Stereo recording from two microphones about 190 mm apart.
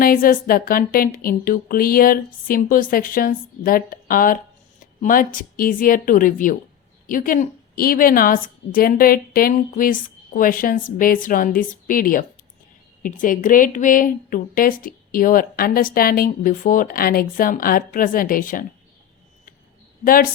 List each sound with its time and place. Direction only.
0.0 s a woman's voice: 50° left (ahead or behind)